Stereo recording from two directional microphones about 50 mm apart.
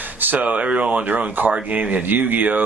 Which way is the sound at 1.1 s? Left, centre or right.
Right.